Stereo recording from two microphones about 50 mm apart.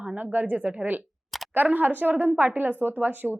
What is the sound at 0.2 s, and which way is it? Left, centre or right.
Speech, right.